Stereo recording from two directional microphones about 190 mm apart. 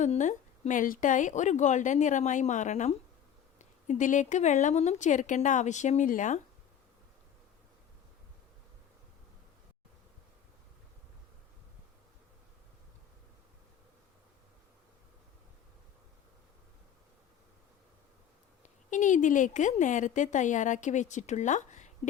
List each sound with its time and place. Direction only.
0.0 s a woman's voice: 40° left (ahead or behind)
18.6 s a woman's voice: 40° left (ahead or behind)